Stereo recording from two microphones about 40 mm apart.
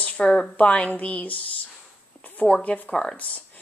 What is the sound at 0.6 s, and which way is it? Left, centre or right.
Speech, left.